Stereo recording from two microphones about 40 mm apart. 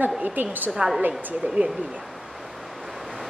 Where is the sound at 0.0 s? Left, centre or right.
Right.